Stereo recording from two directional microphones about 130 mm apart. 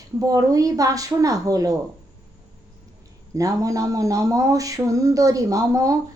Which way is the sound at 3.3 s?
25° right (ahead or behind).